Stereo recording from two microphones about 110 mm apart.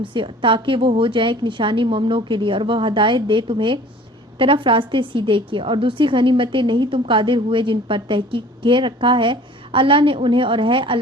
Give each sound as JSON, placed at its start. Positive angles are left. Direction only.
{"t": 0.0, "sound": "a woman's voice", "side_deg": -50}